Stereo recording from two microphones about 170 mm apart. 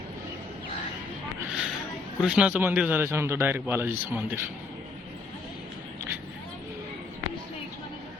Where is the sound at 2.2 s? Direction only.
5° right (ahead or behind).